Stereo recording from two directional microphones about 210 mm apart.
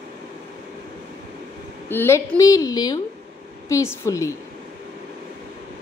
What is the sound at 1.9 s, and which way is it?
A woman's voice, 10° left (ahead or behind).